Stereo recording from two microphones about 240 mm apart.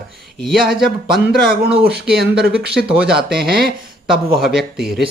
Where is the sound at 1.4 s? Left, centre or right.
Right.